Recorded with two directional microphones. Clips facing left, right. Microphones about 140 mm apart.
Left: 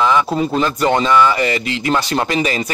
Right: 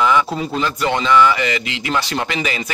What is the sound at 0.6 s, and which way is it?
Speech, 40° left (ahead or behind).